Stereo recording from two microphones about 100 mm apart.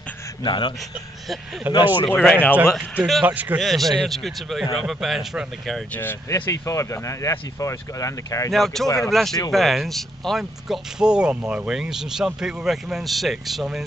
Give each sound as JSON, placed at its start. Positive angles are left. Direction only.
{"t": 0.4, "sound": "speech", "side_deg": 50}
{"t": 1.6, "sound": "a man's voice", "side_deg": -15}
{"t": 2.0, "sound": "speech", "side_deg": 5}
{"t": 3.3, "sound": "a man's voice", "side_deg": -15}
{"t": 3.5, "sound": "speech", "side_deg": 0}
{"t": 6.2, "sound": "speech", "side_deg": 30}
{"t": 8.5, "sound": "speech", "side_deg": 0}
{"t": 8.8, "sound": "speech", "side_deg": 35}
{"t": 9.1, "sound": "speech", "side_deg": 0}